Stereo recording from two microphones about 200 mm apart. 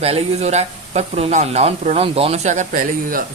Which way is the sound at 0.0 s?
30° right (ahead or behind).